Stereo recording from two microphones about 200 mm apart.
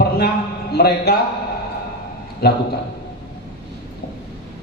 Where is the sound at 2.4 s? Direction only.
55° left (ahead or behind).